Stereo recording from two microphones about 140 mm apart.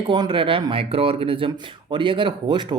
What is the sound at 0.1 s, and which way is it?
Speech, 35° right (ahead or behind).